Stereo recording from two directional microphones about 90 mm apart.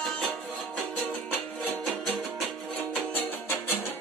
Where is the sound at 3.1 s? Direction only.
25° left (ahead or behind).